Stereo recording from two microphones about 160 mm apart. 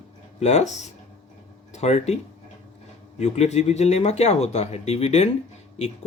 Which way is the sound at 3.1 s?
40° left (ahead or behind).